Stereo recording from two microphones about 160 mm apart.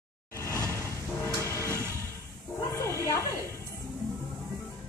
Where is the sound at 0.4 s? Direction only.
15° left (ahead or behind).